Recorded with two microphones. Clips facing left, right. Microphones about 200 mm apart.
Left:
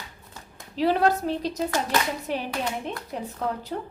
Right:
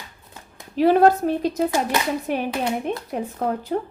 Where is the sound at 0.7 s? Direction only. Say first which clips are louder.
Right 6 dB; 50° right (ahead or behind).